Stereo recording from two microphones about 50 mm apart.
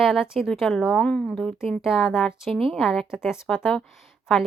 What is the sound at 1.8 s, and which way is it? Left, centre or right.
A woman's voice, centre.